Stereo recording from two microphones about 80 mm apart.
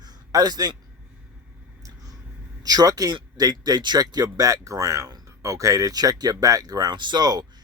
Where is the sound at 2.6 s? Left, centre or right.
Right.